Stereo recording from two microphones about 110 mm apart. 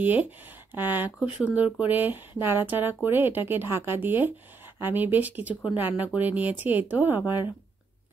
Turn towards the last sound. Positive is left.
turn(degrees=-20)  # may be behind; listen again after turning